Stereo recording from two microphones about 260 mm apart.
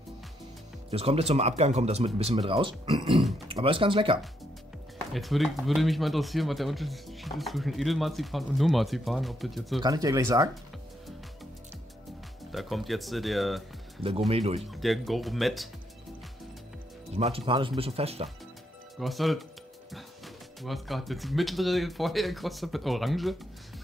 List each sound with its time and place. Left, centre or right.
0.8 s speech: right
5.1 s speech: centre
9.8 s speech: centre
12.5 s speech: centre
14.3 s speech: right
14.6 s speech: centre
17.1 s speech: right
18.9 s speech: centre
20.6 s speech: centre